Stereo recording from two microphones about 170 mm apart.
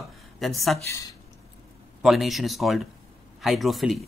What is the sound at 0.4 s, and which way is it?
Speech, centre (ahead or behind).